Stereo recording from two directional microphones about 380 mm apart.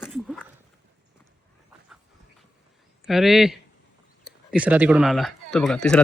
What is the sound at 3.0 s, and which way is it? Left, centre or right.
Speech, centre.